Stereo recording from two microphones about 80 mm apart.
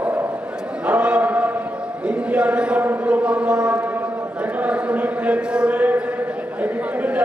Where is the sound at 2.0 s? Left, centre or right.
Centre.